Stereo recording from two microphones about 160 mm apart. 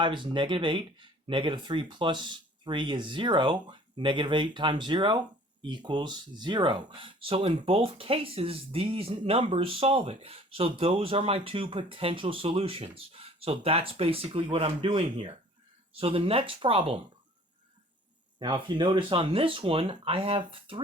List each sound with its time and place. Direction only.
0.0 s speech: 30° right (ahead or behind)
18.3 s speech: 30° right (ahead or behind)